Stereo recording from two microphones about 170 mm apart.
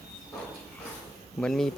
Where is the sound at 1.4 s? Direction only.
5° left (ahead or behind).